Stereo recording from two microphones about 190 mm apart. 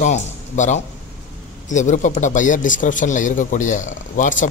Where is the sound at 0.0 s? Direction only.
40° left (ahead or behind).